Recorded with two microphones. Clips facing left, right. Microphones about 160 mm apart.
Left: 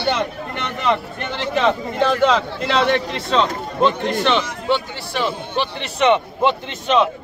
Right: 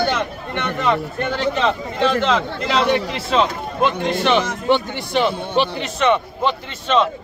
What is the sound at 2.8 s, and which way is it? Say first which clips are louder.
A man's voice: even; 10° right (ahead or behind).